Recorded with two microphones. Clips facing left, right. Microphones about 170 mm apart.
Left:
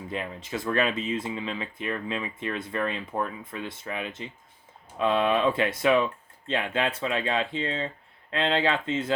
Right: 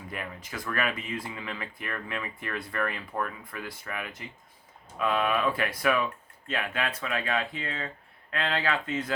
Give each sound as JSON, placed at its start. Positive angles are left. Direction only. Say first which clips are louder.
{"t": 0.1, "sound": "speech", "louder": "left 6 dB", "side_deg": 25}